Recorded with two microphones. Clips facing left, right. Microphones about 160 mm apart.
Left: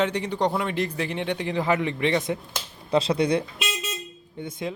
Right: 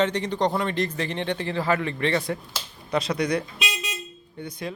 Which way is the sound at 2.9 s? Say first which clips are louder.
Left 3 dB; 25° left (ahead or behind).